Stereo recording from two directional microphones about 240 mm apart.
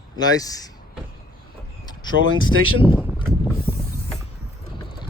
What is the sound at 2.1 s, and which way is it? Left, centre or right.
Speech, left.